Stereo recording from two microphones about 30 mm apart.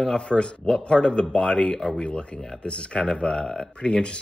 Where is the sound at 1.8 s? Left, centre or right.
Left.